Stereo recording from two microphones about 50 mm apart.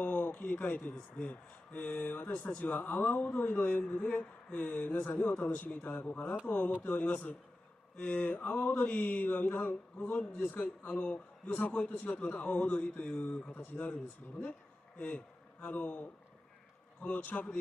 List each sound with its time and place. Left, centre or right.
0.0 s speech: left
1.1 s mantra: left
6.0 s a man's voice: left
6.9 s mantra: left
10.9 s a man's voice: left
13.7 s mantra: left
15.0 s a man's voice: left